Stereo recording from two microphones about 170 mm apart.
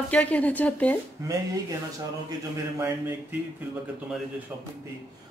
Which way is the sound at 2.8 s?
15° right (ahead or behind).